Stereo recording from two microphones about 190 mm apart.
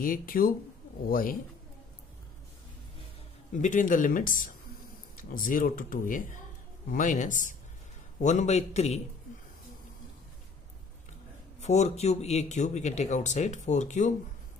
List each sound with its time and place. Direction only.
0.0 s speech: 50° left (ahead or behind)
3.5 s speech: 40° left (ahead or behind)
11.6 s speech: 35° left (ahead or behind)